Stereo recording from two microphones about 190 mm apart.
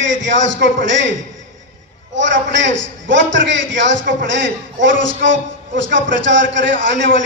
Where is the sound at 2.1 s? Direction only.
70° right (ahead or behind).